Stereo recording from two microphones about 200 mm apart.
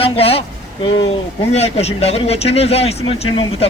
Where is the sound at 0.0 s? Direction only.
30° left (ahead or behind).